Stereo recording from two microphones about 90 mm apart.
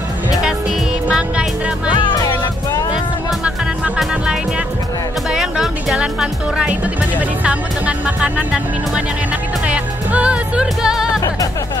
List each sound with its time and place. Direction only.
0.4 s music: 10° right (ahead or behind)
1.9 s music: 65° left (ahead or behind)
4.0 s music: 10° right (ahead or behind)
5.3 s speech: 5° right (ahead or behind)
9.7 s music: 15° right (ahead or behind)